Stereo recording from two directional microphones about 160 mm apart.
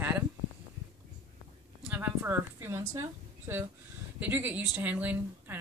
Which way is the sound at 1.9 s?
15° right (ahead or behind).